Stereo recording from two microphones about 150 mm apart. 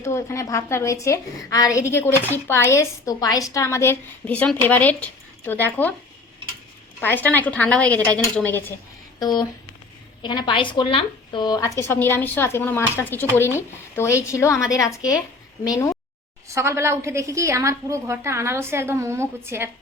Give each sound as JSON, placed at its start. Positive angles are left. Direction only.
{"t": 0.0, "sound": "a woman's voice", "side_deg": 20}
{"t": 7.0, "sound": "a woman's voice", "side_deg": 10}
{"t": 9.1, "sound": "a woman's voice", "side_deg": 30}
{"t": 16.6, "sound": "a woman's voice", "side_deg": -15}